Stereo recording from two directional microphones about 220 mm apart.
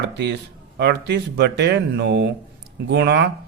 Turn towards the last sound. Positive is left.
turn(degrees=-50)  # may be behind; listen again after turning